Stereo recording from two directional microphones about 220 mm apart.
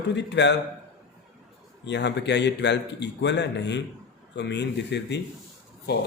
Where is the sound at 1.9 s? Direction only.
50° left (ahead or behind).